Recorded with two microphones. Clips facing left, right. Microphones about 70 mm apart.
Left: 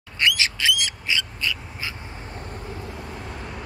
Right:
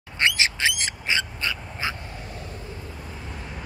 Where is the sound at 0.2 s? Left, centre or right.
Right.